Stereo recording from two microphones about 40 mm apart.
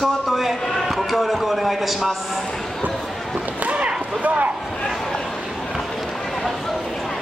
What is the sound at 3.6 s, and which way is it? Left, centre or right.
Whip, right.